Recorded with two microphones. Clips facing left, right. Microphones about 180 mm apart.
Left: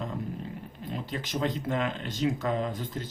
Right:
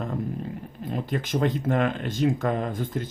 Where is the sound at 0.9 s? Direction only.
55° right (ahead or behind).